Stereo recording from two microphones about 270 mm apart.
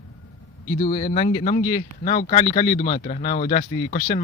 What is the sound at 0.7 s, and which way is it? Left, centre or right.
A man's voice, left.